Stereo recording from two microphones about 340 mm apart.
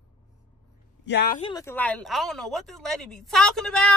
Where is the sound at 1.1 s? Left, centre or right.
Left.